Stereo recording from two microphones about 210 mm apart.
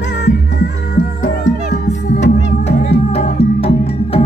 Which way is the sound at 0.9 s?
35° left (ahead or behind).